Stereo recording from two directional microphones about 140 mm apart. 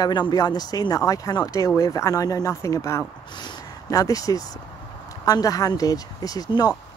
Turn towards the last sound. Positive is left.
turn(degrees=30)  # may be behind; listen again after turning